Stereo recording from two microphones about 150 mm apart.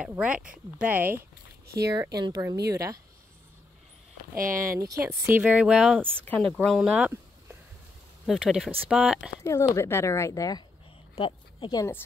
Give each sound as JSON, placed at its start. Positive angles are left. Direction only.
{"t": 0.1, "sound": "speech", "side_deg": -10}
{"t": 2.1, "sound": "speech", "side_deg": -25}
{"t": 4.4, "sound": "speech", "side_deg": -65}
{"t": 5.2, "sound": "speech", "side_deg": -10}
{"t": 6.2, "sound": "speech", "side_deg": 5}
{"t": 8.3, "sound": "speech", "side_deg": -5}
{"t": 9.4, "sound": "speech", "side_deg": 20}
{"t": 11.1, "sound": "speech", "side_deg": 35}